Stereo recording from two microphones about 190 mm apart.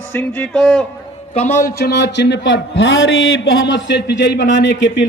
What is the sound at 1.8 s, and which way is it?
A man's voice, 60° left (ahead or behind).